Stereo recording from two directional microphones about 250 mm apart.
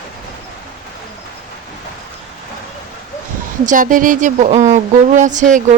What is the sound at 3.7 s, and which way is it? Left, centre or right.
Speech, right.